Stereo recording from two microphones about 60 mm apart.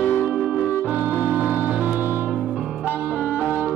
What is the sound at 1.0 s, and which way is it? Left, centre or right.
Music, right.